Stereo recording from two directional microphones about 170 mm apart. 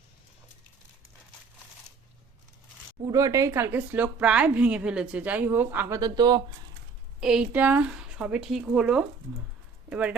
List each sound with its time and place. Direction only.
3.0 s speech: 20° right (ahead or behind)
6.0 s speech: 25° right (ahead or behind)
7.2 s speech: 5° right (ahead or behind)